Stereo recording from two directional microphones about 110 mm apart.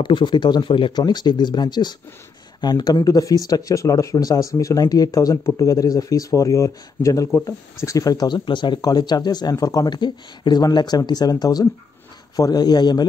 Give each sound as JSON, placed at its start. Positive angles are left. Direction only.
{"t": 0.0, "sound": "speech", "side_deg": 45}